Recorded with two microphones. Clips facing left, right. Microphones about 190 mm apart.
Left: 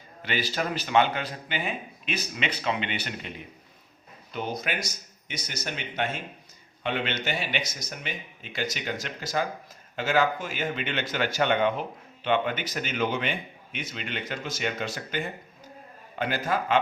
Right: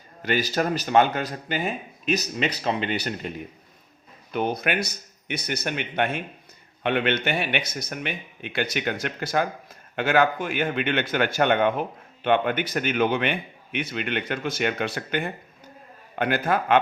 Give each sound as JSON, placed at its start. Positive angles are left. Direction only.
{"t": 0.2, "sound": "speech", "side_deg": -45}
{"t": 4.3, "sound": "a man's voice", "side_deg": -60}